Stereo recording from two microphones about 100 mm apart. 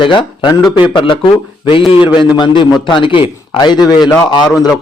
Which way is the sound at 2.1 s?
50° left (ahead or behind).